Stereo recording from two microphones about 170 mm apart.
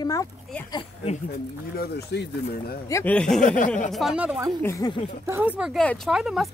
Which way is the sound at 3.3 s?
50° left (ahead or behind).